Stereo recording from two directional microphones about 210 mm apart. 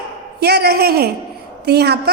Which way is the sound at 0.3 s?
50° right (ahead or behind).